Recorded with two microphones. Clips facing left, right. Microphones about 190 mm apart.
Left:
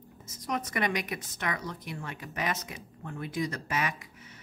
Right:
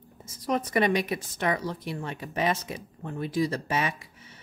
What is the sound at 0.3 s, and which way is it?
Speech, 30° right (ahead or behind).